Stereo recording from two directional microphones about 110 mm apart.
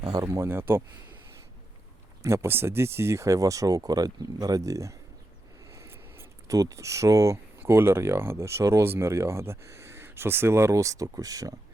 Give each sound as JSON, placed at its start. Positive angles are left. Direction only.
{"t": 0.0, "sound": "speech", "side_deg": -40}
{"t": 0.3, "sound": "speech", "side_deg": -20}
{"t": 2.2, "sound": "speech", "side_deg": -25}